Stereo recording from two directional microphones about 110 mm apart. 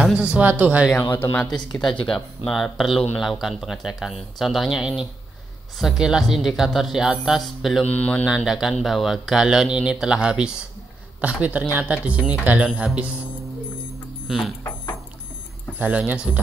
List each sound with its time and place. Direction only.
0.0 s speech: 10° right (ahead or behind)
1.1 s speech: 20° left (ahead or behind)
1.9 s speech: centre (ahead or behind)
7.9 s mantra: 15° left (ahead or behind)
8.3 s speech: 5° right (ahead or behind)
14.2 s speech: centre (ahead or behind)
15.8 s speech: 15° right (ahead or behind)